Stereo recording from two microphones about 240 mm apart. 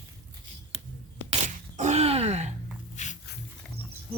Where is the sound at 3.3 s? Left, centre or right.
Left.